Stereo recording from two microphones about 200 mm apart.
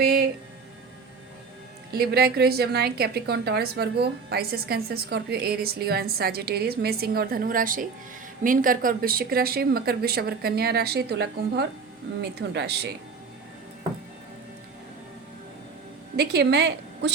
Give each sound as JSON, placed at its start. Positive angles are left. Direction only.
{"t": 0.0, "sound": "music", "side_deg": -50}
{"t": 2.0, "sound": "a woman's voice", "side_deg": -50}
{"t": 16.1, "sound": "a woman's voice", "side_deg": -55}